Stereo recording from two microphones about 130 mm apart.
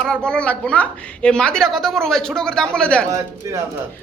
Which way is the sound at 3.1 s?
25° right (ahead or behind).